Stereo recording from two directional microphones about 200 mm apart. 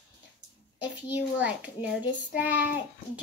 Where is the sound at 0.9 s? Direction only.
10° right (ahead or behind).